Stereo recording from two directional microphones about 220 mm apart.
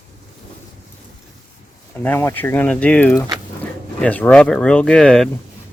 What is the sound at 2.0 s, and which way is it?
Speech, 10° left (ahead or behind).